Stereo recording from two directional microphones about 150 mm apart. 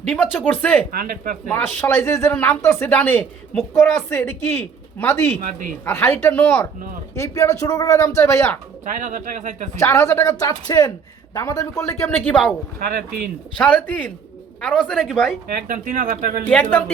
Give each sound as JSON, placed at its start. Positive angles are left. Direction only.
{"t": 0.2, "sound": "speech", "side_deg": 10}
{"t": 0.9, "sound": "speech", "side_deg": -75}
{"t": 1.5, "sound": "speech", "side_deg": 10}
{"t": 5.4, "sound": "speech", "side_deg": -65}
{"t": 5.8, "sound": "a man's voice", "side_deg": 15}
{"t": 8.8, "sound": "speech", "side_deg": -55}
{"t": 9.7, "sound": "a man's voice", "side_deg": 20}
{"t": 13.6, "sound": "speech", "side_deg": 10}
{"t": 15.4, "sound": "speech", "side_deg": -65}
{"t": 16.5, "sound": "speech", "side_deg": 10}